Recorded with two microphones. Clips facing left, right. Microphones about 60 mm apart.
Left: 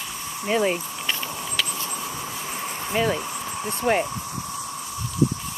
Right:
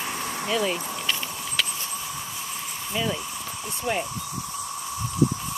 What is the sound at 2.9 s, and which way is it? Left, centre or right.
Speech, left.